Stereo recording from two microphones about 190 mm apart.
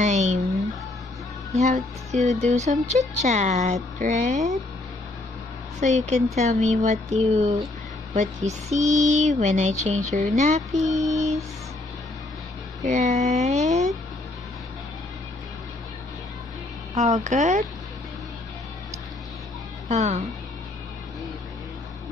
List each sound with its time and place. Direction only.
0.0 s a sound: 40° right (ahead or behind)
1.5 s music: 35° right (ahead or behind)
2.1 s speech: 35° right (ahead or behind)
5.8 s speech: 35° right (ahead or behind)
10.8 s mantra: centre (ahead or behind)
12.8 s speech: 35° right (ahead or behind)
16.9 s speech: 35° right (ahead or behind)
19.9 s speech: 35° right (ahead or behind)